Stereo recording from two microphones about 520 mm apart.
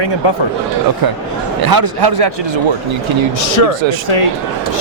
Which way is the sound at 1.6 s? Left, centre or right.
Right.